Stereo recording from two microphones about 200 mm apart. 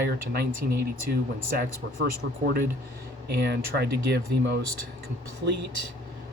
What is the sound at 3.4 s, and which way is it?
Speech, 55° right (ahead or behind).